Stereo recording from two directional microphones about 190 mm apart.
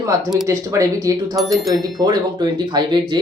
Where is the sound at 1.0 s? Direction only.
20° right (ahead or behind).